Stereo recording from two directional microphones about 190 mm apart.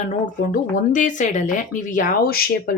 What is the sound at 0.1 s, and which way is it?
Speech, 45° left (ahead or behind).